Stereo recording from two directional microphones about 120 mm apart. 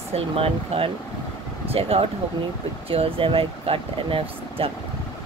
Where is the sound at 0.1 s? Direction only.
55° right (ahead or behind).